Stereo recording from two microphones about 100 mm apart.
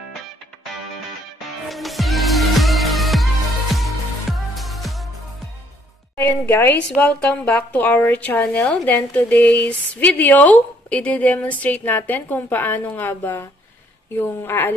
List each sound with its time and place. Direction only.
1.7 s music: centre (ahead or behind)
6.1 s a woman's voice: 20° left (ahead or behind)